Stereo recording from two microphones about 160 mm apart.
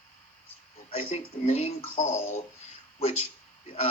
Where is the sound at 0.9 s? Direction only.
35° left (ahead or behind).